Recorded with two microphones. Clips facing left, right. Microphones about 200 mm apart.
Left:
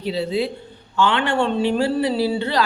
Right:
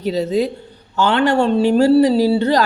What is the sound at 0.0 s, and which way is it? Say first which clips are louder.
A woman's voice: right 4 dB; 45° right (ahead or behind).